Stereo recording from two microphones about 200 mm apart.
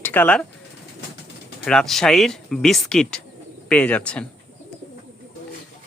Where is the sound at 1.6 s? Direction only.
5° left (ahead or behind).